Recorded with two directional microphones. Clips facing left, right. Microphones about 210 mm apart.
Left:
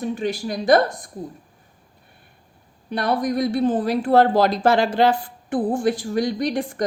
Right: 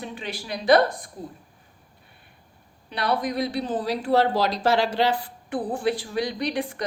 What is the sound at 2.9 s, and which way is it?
Speech, 45° left (ahead or behind).